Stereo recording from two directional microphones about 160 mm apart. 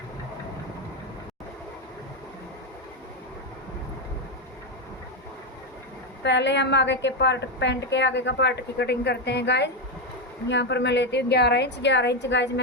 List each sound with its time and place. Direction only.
6.2 s a woman's voice: 90° left